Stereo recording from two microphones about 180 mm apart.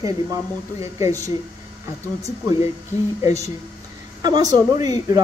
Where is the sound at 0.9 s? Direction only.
20° right (ahead or behind).